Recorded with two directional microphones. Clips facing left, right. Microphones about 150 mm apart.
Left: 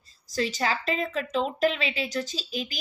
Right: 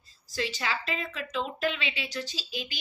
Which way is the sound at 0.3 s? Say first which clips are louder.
Left 5 dB; 40° left (ahead or behind).